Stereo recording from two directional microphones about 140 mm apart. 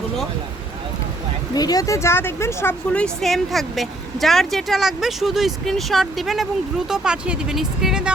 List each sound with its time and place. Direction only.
1.5 s speech: 25° left (ahead or behind)
2.9 s speech: 5° left (ahead or behind)